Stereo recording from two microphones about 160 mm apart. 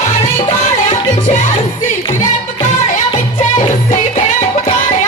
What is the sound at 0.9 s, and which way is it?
Music, 50° left (ahead or behind).